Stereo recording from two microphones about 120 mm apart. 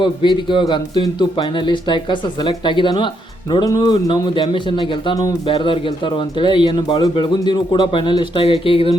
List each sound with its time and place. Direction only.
0.0 s speech: 40° left (ahead or behind)
5.1 s speech: 30° left (ahead or behind)
5.5 s speech: 45° left (ahead or behind)